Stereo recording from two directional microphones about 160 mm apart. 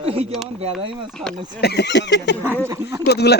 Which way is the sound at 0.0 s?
35° right (ahead or behind).